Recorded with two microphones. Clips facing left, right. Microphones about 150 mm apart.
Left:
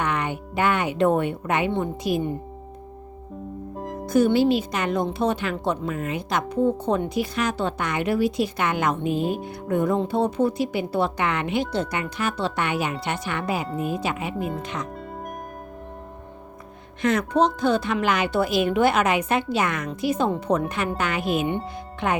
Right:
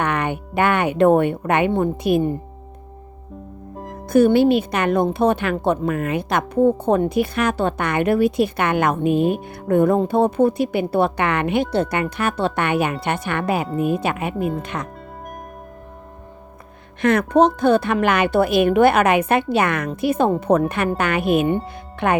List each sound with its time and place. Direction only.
0.0 s a woman's voice: 60° right (ahead or behind)
4.0 s speech: 55° right (ahead or behind)
14.3 s speech: centre (ahead or behind)
14.6 s speech: 60° right (ahead or behind)
17.0 s speech: 60° right (ahead or behind)